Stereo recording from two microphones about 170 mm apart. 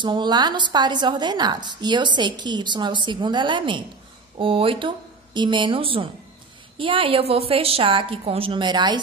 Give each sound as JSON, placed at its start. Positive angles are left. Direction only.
{"t": 0.0, "sound": "a woman's voice", "side_deg": -25}